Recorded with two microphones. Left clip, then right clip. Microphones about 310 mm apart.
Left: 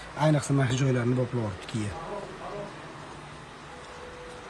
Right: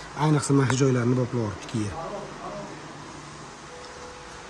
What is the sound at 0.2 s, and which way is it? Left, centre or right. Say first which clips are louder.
Speech: right 2 dB; centre.